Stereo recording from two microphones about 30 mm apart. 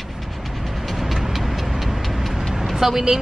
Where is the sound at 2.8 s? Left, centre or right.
Centre.